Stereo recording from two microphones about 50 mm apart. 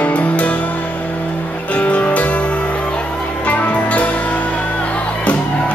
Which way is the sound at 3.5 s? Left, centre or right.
Left.